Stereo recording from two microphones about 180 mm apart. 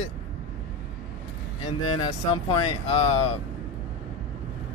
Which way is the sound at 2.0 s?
30° left (ahead or behind).